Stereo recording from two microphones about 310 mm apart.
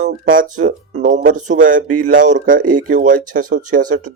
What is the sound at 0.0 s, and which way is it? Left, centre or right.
A man's voice, right.